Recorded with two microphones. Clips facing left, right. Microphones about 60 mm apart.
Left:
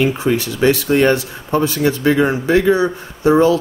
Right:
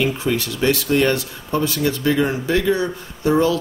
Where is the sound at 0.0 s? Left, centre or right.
Left.